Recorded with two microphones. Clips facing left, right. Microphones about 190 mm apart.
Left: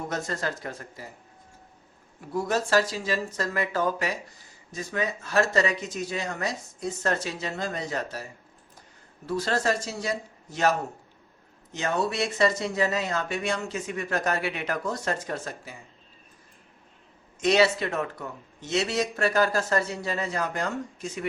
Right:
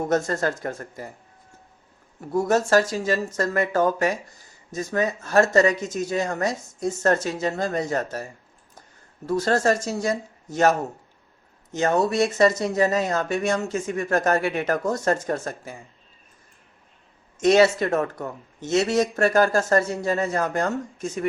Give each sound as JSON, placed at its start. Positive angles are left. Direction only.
{"t": 0.1, "sound": "speech", "side_deg": -50}
{"t": 2.3, "sound": "speech", "side_deg": -45}
{"t": 9.2, "sound": "speech", "side_deg": -45}
{"t": 17.4, "sound": "speech", "side_deg": -45}